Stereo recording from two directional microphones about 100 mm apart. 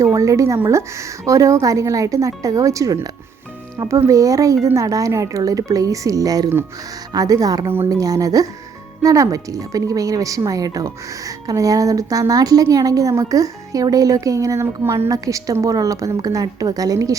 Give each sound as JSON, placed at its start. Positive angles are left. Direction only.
{"t": 0.0, "sound": "speech", "side_deg": -30}